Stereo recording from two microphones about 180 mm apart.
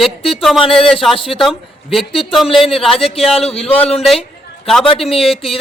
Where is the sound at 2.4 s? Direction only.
30° left (ahead or behind).